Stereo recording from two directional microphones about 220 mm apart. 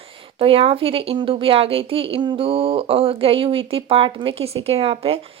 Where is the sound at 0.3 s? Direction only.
25° right (ahead or behind).